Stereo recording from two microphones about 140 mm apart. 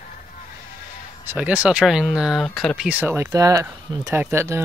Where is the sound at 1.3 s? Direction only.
10° right (ahead or behind).